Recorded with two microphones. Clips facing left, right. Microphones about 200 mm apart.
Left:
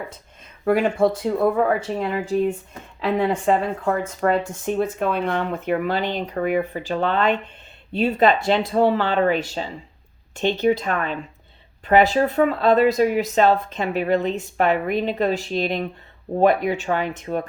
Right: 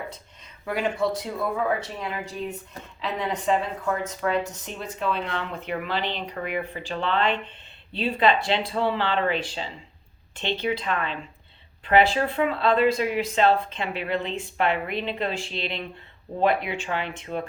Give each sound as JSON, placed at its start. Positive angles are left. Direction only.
{"t": 0.6, "sound": "speech", "side_deg": 50}
{"t": 3.0, "sound": "speech", "side_deg": 50}